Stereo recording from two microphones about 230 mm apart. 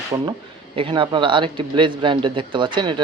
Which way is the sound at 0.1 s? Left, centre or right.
Centre.